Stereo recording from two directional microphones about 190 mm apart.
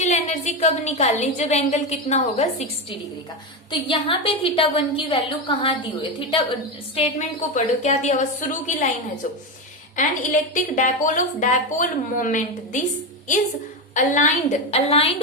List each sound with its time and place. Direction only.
0.0 s a woman's voice: 35° left (ahead or behind)
10.5 s speech: 40° left (ahead or behind)
13.9 s a woman's voice: 40° left (ahead or behind)